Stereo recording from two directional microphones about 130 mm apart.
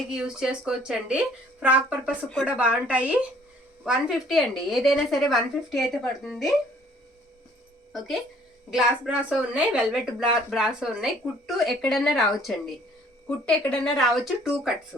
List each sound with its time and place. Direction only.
0.1 s a woman's voice: 5° right (ahead or behind)
7.9 s speech: centre (ahead or behind)